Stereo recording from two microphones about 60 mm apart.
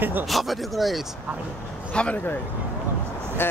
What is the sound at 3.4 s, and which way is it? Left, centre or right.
Speech, left.